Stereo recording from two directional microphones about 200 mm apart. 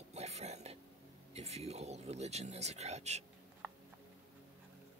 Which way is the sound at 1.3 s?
30° right (ahead or behind).